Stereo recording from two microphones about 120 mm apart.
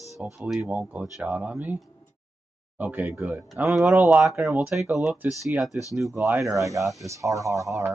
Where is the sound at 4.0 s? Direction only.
15° right (ahead or behind).